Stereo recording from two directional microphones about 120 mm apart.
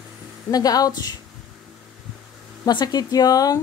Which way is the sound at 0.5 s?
30° left (ahead or behind).